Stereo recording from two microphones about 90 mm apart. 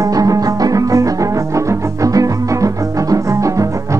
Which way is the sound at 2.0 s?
40° right (ahead or behind).